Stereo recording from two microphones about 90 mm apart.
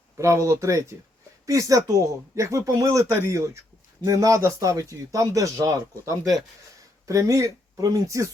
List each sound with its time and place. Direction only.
0.2 s speech: 35° right (ahead or behind)